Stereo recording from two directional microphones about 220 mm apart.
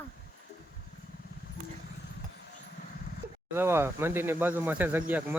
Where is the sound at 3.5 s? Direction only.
10° right (ahead or behind).